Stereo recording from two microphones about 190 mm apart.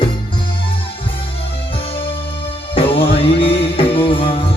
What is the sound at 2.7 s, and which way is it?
Music, 30° left (ahead or behind).